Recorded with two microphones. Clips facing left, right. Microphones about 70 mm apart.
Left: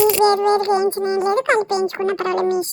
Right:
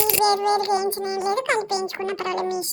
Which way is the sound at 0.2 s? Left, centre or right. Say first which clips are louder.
Left 5 dB; left.